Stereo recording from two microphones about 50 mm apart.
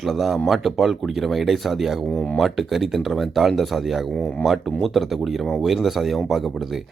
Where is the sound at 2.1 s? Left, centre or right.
Left.